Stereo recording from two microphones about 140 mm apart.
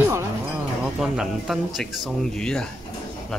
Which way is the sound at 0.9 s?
5° right (ahead or behind).